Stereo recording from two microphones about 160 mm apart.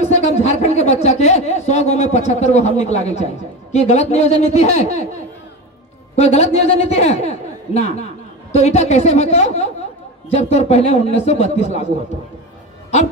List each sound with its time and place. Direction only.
0.0 s a woman's voice: 45° left (ahead or behind)
6.1 s a man's voice: 40° left (ahead or behind)